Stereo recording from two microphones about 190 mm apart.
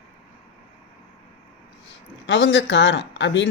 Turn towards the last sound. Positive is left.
turn(degrees=70)  # may be behind; listen again after turning